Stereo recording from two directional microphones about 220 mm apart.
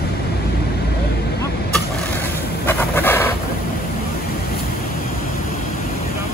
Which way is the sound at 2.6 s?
10° left (ahead or behind).